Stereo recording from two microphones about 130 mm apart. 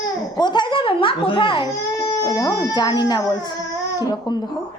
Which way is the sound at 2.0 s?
25° left (ahead or behind).